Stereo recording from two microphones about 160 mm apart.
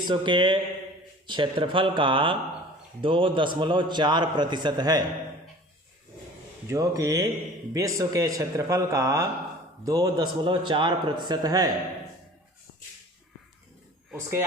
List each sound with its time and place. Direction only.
0.0 s a man's voice: 30° right (ahead or behind)
6.7 s a man's voice: 20° right (ahead or behind)
14.1 s speech: 15° right (ahead or behind)